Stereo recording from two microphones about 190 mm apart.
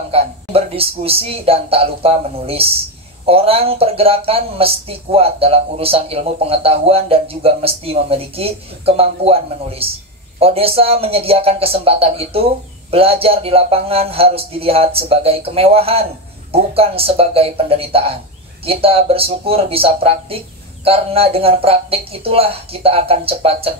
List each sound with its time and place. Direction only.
0.1 s speech: 30° right (ahead or behind)